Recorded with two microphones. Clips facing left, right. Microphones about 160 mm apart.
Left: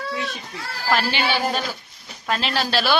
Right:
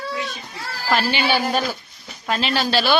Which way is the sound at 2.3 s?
Centre (ahead or behind).